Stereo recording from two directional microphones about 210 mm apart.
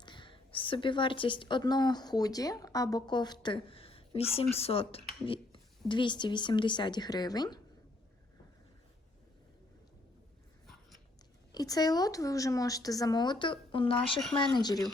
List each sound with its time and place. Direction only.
0.0 s a woman's voice: 20° left (ahead or behind)
11.5 s a woman's voice: 15° left (ahead or behind)